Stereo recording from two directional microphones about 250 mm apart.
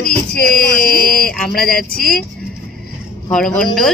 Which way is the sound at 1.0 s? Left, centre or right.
Centre.